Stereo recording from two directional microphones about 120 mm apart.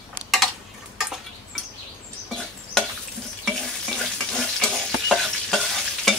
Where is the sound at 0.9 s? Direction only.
Centre (ahead or behind).